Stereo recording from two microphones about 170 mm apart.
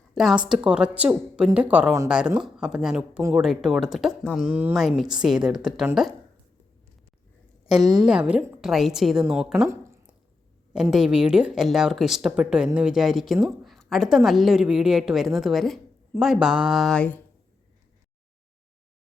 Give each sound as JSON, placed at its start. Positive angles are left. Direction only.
{"t": 0.1, "sound": "speech", "side_deg": 0}
{"t": 7.9, "sound": "speech", "side_deg": -5}
{"t": 9.6, "sound": "a sound", "side_deg": -15}
{"t": 10.9, "sound": "speech", "side_deg": -5}